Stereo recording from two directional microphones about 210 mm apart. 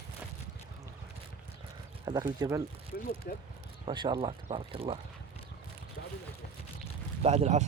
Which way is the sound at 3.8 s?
20° right (ahead or behind).